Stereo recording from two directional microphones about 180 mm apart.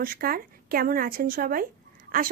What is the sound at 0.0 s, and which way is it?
Speech, 55° right (ahead or behind).